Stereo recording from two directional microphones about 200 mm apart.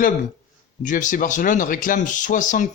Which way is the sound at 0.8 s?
40° left (ahead or behind).